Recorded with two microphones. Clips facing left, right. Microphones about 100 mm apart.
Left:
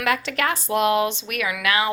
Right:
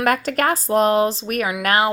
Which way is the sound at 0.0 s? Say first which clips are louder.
Right 4 dB; 45° right (ahead or behind).